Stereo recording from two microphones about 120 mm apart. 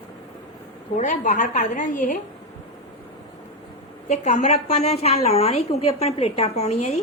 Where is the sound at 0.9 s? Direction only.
85° left.